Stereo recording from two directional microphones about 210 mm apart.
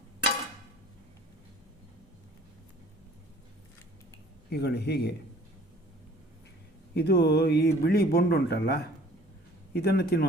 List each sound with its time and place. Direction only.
4.4 s speech: 50° left (ahead or behind)
6.9 s speech: 50° left (ahead or behind)